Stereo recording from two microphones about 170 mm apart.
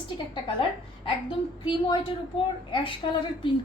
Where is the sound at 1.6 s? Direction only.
30° left (ahead or behind).